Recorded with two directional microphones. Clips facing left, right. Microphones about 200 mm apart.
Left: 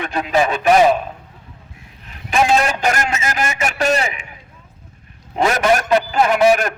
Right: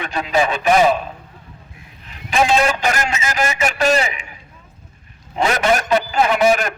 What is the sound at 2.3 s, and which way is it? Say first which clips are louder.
Speech: even; 45° left (ahead or behind).